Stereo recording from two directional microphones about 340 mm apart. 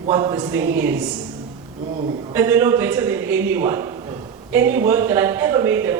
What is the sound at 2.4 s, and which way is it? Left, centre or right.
Speech, centre.